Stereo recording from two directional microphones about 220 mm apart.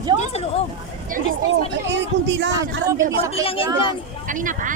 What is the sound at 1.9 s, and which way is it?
Speech, 55° right (ahead or behind).